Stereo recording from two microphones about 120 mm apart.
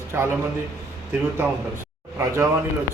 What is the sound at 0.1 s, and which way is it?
Speech, 20° right (ahead or behind).